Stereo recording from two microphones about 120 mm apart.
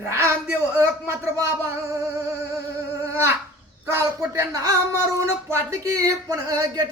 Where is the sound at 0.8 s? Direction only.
25° right (ahead or behind).